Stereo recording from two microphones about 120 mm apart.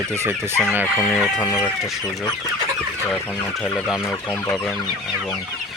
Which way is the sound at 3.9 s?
30° left (ahead or behind).